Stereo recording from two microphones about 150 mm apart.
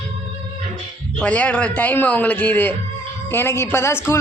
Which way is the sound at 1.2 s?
10° left (ahead or behind).